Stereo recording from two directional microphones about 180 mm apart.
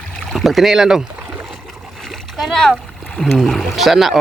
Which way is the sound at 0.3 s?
Centre (ahead or behind).